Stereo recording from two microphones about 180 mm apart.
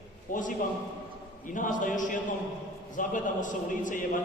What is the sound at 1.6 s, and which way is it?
A man's voice, 45° left (ahead or behind).